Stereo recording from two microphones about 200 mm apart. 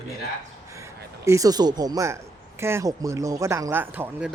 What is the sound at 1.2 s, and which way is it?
Speech, 15° right (ahead or behind).